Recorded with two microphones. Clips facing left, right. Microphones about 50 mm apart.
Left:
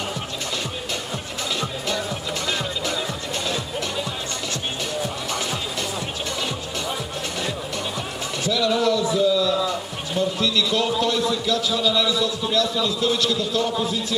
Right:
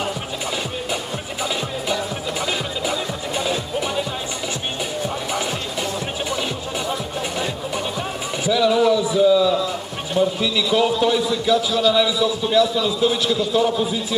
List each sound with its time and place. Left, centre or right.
2.9 s music: centre
8.5 s a sound: centre
9.7 s a man's voice: centre